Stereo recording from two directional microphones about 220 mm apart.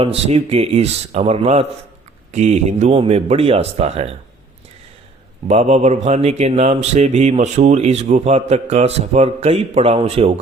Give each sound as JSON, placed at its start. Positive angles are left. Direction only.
{"t": 0.0, "sound": "speech", "side_deg": -25}
{"t": 5.5, "sound": "speech", "side_deg": -30}